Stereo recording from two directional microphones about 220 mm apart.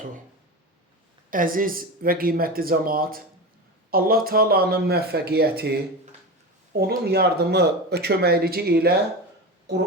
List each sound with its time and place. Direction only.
1.3 s speech: 40° right (ahead or behind)
6.7 s speech: 45° right (ahead or behind)